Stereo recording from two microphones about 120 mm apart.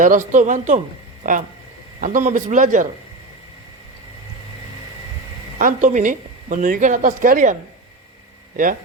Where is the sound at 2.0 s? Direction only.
90° right.